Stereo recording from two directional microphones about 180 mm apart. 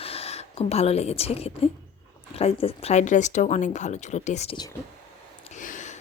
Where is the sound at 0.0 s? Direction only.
35° left (ahead or behind).